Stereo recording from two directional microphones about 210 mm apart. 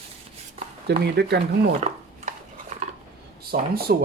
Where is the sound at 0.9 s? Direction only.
50° right (ahead or behind).